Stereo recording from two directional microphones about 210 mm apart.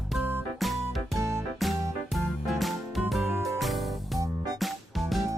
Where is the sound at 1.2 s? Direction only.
15° right (ahead or behind).